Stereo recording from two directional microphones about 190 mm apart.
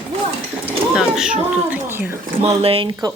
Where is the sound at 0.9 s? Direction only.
5° right (ahead or behind).